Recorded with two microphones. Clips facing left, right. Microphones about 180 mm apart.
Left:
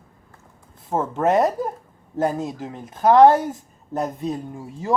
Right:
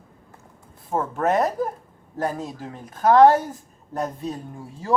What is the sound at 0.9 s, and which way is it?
A woman's voice, 20° left (ahead or behind).